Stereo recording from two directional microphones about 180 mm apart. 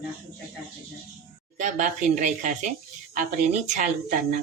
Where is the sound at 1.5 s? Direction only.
45° right (ahead or behind).